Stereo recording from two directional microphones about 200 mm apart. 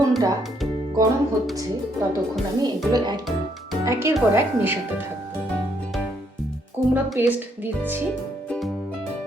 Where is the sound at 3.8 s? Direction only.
15° right (ahead or behind).